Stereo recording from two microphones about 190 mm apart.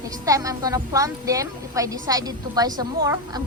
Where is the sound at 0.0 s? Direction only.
15° right (ahead or behind).